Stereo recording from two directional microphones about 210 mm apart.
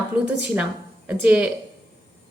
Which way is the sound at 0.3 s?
5° right (ahead or behind).